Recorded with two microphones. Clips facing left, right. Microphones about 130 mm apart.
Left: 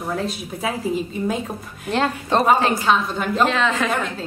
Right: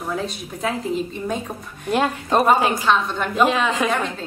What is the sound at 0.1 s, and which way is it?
Speech, 5° left (ahead or behind).